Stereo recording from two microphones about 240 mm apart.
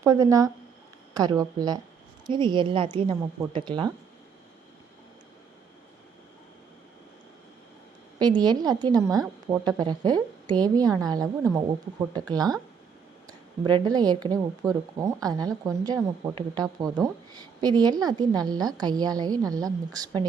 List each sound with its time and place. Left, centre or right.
0.0 s a woman's voice: centre
8.4 s speech: centre